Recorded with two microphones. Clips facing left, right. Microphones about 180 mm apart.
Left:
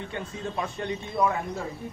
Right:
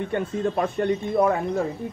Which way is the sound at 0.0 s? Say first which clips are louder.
Right 9 dB; 55° right (ahead or behind).